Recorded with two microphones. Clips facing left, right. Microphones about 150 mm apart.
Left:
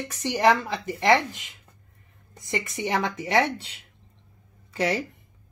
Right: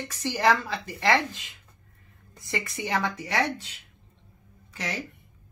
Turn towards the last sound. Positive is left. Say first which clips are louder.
# left 9 dB
turn(degrees=30)  # may be behind; listen again after turning